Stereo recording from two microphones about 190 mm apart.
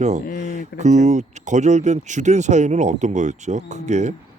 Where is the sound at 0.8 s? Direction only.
40° right (ahead or behind).